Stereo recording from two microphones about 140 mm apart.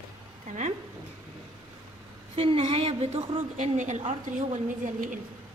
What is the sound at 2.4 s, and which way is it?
Speech, 40° right (ahead or behind).